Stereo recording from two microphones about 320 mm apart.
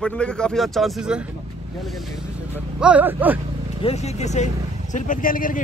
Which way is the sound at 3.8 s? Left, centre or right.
Centre.